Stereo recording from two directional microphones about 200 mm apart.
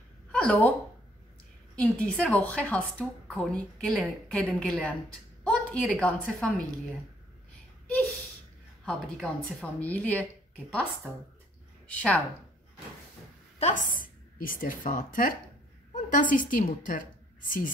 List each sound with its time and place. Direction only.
0.3 s speech: 5° left (ahead or behind)
1.8 s a woman's voice: 5° left (ahead or behind)
8.8 s a woman's voice: 5° left (ahead or behind)
11.9 s a woman's voice: 5° left (ahead or behind)
13.6 s a woman's voice: 35° left (ahead or behind)